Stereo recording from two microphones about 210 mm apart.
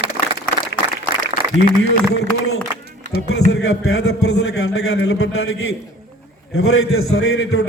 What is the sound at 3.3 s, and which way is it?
A man's voice, 75° left (ahead or behind).